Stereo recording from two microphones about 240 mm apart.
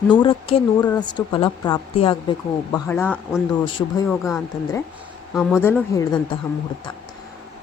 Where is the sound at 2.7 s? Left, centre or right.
Centre.